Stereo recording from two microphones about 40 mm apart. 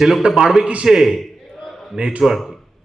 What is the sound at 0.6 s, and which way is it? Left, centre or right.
Speech, right.